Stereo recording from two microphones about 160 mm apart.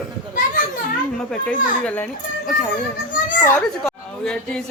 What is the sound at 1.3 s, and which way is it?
Speech, 10° left (ahead or behind).